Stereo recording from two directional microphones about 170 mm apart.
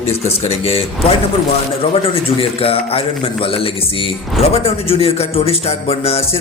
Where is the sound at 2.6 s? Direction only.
35° left (ahead or behind).